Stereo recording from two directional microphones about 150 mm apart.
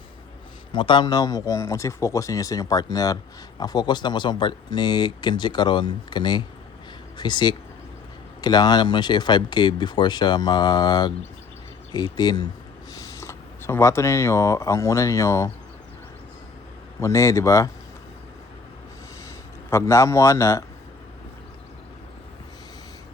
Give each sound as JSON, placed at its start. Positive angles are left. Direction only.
{"t": 0.7, "sound": "speech", "side_deg": 30}
{"t": 17.0, "sound": "speech", "side_deg": 20}
{"t": 19.7, "sound": "speech", "side_deg": 20}